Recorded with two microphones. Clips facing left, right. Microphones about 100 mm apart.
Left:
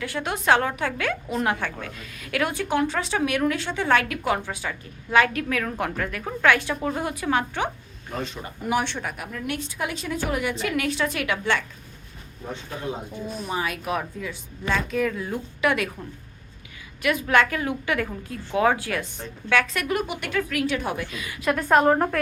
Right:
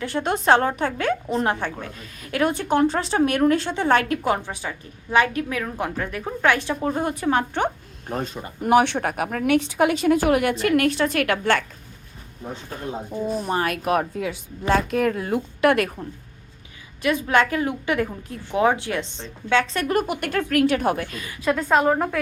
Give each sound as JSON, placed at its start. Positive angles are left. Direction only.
{"t": 0.0, "sound": "speech", "side_deg": -30}
{"t": 4.4, "sound": "a woman's voice", "side_deg": -25}
{"t": 7.6, "sound": "speech", "side_deg": -50}
{"t": 10.6, "sound": "a woman's voice", "side_deg": -55}
{"t": 13.5, "sound": "speech", "side_deg": -55}
{"t": 17.0, "sound": "a woman's voice", "side_deg": -25}
{"t": 21.5, "sound": "a woman's voice", "side_deg": 10}
{"t": 21.8, "sound": "a woman's voice", "side_deg": 0}